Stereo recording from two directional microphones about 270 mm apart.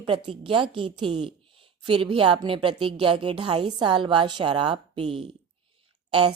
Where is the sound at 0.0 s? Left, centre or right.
Centre.